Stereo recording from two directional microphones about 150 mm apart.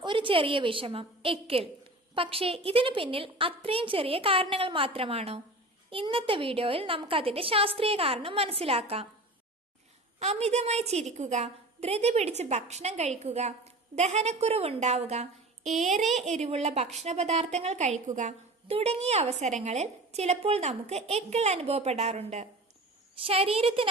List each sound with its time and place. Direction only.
0.0 s a woman's voice: 35° right (ahead or behind)
10.2 s a woman's voice: 45° right (ahead or behind)